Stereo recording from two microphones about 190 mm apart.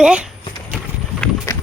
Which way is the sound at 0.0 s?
5° right (ahead or behind).